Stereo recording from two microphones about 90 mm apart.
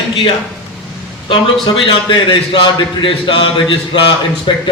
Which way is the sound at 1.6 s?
65° left (ahead or behind).